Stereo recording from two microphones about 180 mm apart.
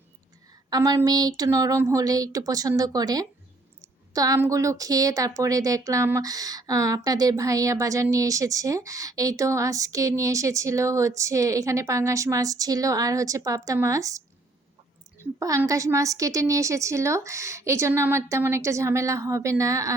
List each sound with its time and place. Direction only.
0.7 s speech: 20° right (ahead or behind)
15.4 s speech: 20° right (ahead or behind)